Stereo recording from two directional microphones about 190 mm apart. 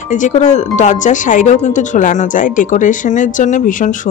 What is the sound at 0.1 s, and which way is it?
Speech, 40° left (ahead or behind).